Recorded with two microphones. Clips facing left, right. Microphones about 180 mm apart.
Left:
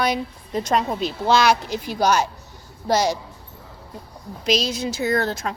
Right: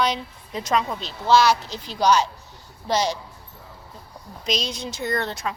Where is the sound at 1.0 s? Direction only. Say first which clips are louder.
Right 2 dB; 15° left (ahead or behind).